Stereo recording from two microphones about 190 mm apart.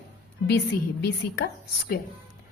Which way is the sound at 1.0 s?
60° left (ahead or behind).